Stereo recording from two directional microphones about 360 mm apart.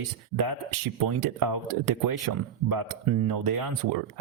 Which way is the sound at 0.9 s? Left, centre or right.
Right.